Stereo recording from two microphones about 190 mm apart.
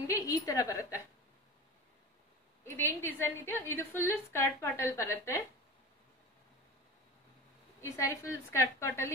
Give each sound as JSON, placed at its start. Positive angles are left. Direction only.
{"t": 0.0, "sound": "a woman's voice", "side_deg": 15}
{"t": 2.6, "sound": "a woman's voice", "side_deg": 15}
{"t": 7.8, "sound": "a woman's voice", "side_deg": 15}